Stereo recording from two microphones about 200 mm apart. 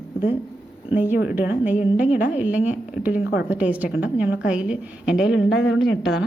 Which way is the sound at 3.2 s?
60° left (ahead or behind).